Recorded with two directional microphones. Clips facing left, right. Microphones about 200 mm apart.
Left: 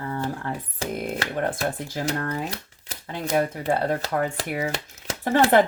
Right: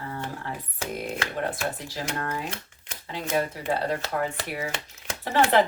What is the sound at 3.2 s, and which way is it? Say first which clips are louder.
Speech: left 4 dB; 45° left (ahead or behind).